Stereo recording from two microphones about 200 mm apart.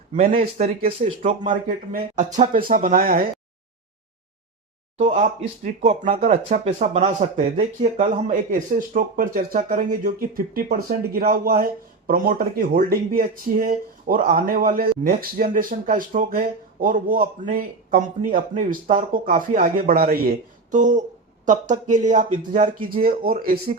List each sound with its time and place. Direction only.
0.3 s speech: 40° right (ahead or behind)
1.5 s speech: 45° right (ahead or behind)
4.9 s speech: 35° right (ahead or behind)